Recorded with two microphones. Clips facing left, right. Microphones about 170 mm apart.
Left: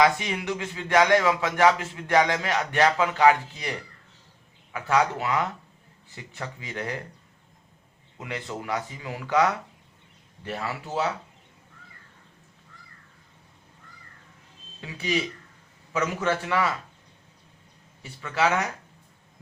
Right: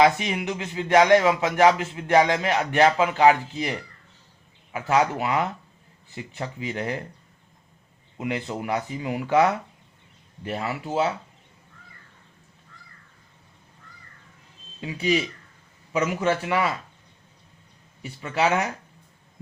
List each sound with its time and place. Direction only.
0.0 s speech: 25° right (ahead or behind)
8.2 s speech: 20° right (ahead or behind)
14.8 s a man's voice: 20° right (ahead or behind)
18.0 s speech: 20° right (ahead or behind)